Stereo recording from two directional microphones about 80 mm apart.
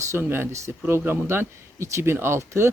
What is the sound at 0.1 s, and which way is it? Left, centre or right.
Speech, right.